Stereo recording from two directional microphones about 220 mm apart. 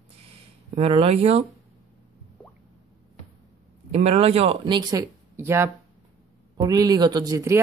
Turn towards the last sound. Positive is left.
turn(degrees=-15)  # may be behind; listen again after turning